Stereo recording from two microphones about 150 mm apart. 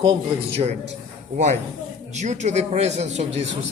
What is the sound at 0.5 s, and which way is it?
Speech, 45° right (ahead or behind).